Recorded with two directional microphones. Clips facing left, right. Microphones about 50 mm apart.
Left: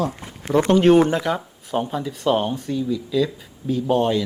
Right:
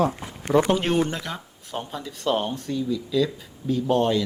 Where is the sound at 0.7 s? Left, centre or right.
Centre.